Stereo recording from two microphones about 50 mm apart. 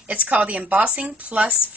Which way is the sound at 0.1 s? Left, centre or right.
Right.